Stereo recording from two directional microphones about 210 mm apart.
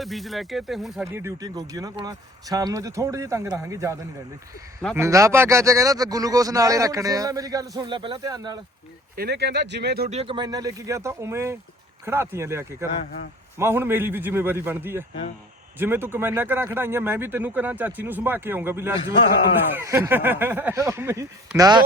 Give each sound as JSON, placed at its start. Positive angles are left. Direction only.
{"t": 0.0, "sound": "speech", "side_deg": 0}
{"t": 1.0, "sound": "speech", "side_deg": -10}
{"t": 4.9, "sound": "speech", "side_deg": -15}
{"t": 9.1, "sound": "speech", "side_deg": -50}
{"t": 10.1, "sound": "speech", "side_deg": -25}